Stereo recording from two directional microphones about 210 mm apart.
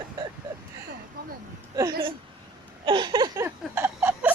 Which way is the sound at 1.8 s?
15° right (ahead or behind).